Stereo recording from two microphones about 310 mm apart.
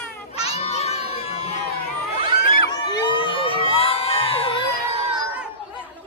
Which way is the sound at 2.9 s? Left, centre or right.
Centre.